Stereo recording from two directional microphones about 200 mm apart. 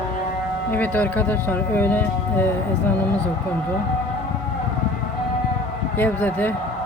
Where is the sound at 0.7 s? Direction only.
10° left (ahead or behind).